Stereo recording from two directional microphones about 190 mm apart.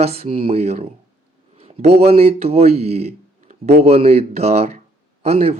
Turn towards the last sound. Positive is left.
turn(degrees=-35)  # may be behind; listen again after turning